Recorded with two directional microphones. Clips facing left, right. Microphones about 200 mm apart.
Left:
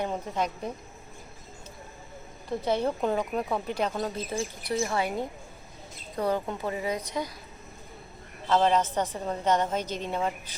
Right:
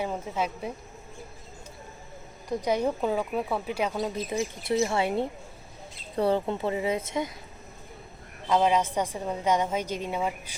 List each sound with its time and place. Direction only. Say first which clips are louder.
0.0 s speech: even; 5° right (ahead or behind)
2.5 s a woman's voice: right 1 dB; 15° right (ahead or behind)
8.4 s speech: even; 10° right (ahead or behind)